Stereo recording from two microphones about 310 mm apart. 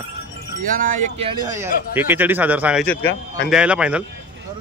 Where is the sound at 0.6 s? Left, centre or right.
Right; by 4.0 s centre.